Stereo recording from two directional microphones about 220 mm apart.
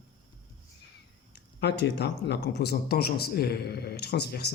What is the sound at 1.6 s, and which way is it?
Speech, 50° left (ahead or behind).